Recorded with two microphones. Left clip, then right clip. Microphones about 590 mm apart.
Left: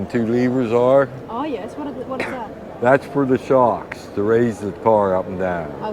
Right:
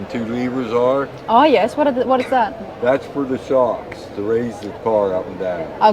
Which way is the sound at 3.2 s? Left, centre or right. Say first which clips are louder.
Left 3 dB; centre.